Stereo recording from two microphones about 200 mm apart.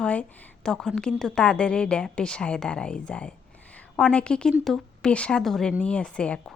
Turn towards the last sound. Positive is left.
turn(degrees=5)  # may be behind; listen again after turning